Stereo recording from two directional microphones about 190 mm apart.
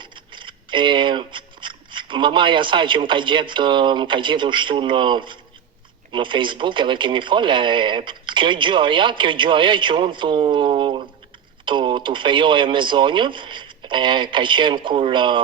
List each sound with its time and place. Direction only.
0.0 s speech: 25° right (ahead or behind)